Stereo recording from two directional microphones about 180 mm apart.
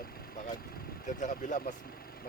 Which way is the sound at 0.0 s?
55° left (ahead or behind).